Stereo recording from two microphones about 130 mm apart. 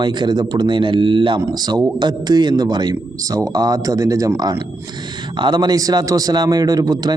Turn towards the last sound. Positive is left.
turn(degrees=-30)  # may be behind; listen again after turning